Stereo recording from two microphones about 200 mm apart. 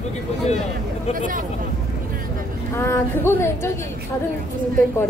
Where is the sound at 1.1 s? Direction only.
45° right (ahead or behind).